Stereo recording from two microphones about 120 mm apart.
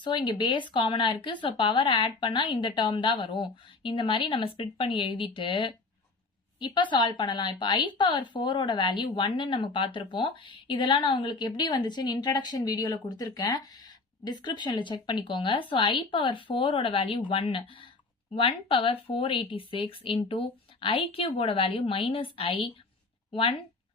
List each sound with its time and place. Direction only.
0.3 s speech: 40° left (ahead or behind)